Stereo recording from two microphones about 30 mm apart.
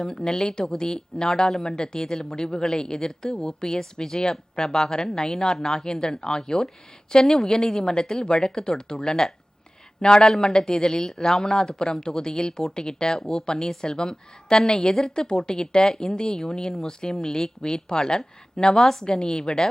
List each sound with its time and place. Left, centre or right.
0.0 s speech: left
18.8 s a woman's voice: centre
19.0 s speech: left